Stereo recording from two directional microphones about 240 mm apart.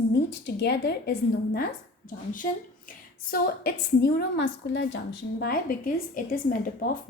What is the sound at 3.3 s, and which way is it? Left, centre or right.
A woman's voice, left.